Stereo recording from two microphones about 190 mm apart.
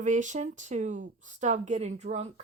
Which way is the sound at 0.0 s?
40° right (ahead or behind).